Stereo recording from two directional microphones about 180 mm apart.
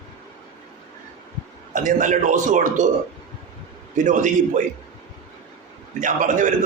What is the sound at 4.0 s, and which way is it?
Speech, 45° right (ahead or behind).